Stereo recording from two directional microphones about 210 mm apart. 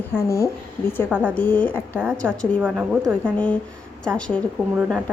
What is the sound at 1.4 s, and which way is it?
A woman's voice, 10° left (ahead or behind).